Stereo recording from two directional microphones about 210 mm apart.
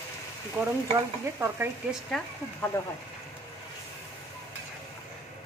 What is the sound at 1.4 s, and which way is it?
Speech, 10° right (ahead or behind).